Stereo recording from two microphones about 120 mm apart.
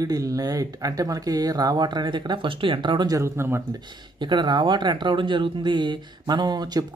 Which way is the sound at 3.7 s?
40° right (ahead or behind).